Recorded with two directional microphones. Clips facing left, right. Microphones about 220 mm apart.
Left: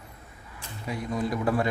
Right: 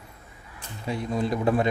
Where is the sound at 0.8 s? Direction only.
25° right (ahead or behind).